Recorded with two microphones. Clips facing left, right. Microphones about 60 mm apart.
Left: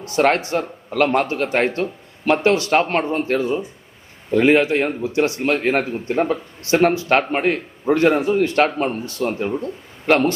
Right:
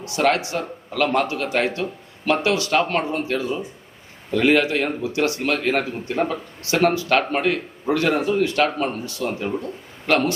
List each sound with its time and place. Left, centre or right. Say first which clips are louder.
0.0 s a man's voice: left 3 dB; left
4.3 s a man's voice: left 3 dB; left